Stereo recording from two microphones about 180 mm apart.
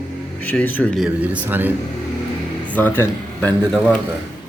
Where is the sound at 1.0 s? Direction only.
10° right (ahead or behind).